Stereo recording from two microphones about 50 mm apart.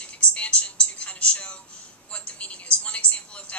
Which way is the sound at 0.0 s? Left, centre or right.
Left.